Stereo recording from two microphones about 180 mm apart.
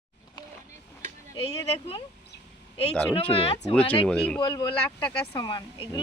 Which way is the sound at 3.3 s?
35° left (ahead or behind).